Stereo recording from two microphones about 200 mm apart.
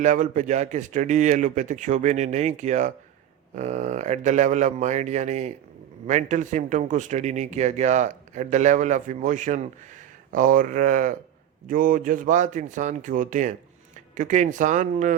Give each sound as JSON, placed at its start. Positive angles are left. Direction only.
{"t": 0.0, "sound": "speech", "side_deg": -40}